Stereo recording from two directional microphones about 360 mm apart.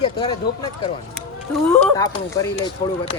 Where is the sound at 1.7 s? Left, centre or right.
Centre.